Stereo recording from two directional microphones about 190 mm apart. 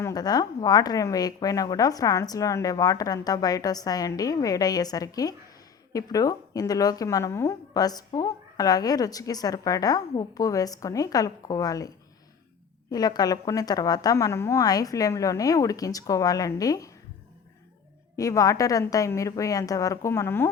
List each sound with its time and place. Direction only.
0.0 s speech: 20° left (ahead or behind)
12.9 s speech: 20° left (ahead or behind)
18.2 s a woman's voice: 15° left (ahead or behind)